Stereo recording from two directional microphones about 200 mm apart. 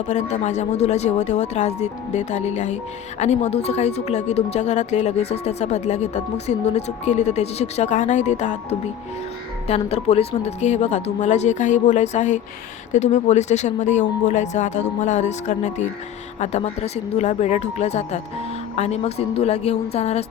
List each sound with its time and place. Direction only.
0.1 s speech: 35° left (ahead or behind)
9.6 s speech: 30° left (ahead or behind)